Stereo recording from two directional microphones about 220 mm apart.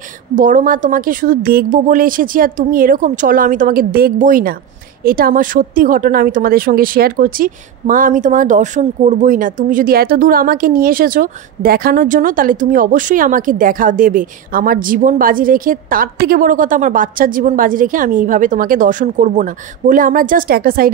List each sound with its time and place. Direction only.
0.4 s speech: 35° right (ahead or behind)